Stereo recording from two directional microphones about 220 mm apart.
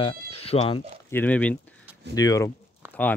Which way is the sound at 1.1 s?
5° left (ahead or behind).